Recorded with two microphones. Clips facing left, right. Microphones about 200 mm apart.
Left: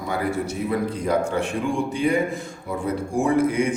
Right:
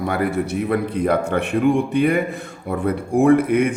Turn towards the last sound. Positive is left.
turn(degrees=-60)  # may be behind; listen again after turning